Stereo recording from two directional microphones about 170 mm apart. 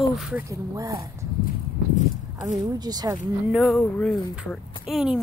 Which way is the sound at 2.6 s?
25° right (ahead or behind).